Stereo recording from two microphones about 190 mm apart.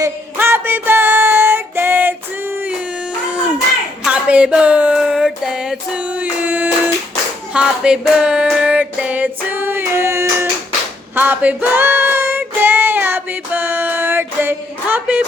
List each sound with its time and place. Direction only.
0.0 s music: 10° right (ahead or behind)
4.0 s a sound: 5° right (ahead or behind)
11.1 s music: 10° right (ahead or behind)